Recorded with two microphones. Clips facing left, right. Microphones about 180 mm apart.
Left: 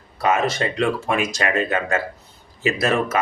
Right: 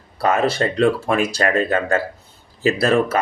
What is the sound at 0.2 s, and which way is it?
Speech, 35° right (ahead or behind).